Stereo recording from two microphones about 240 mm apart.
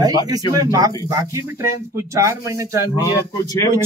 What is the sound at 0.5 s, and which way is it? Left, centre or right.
Speech, centre.